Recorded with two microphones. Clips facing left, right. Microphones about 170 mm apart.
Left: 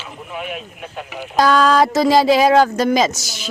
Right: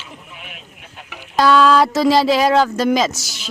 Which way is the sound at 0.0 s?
75° left (ahead or behind).